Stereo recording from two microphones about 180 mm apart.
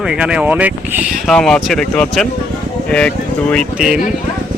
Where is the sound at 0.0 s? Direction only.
5° right (ahead or behind).